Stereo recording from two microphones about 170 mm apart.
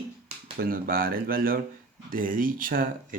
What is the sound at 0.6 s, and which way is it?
Speech, 60° right (ahead or behind).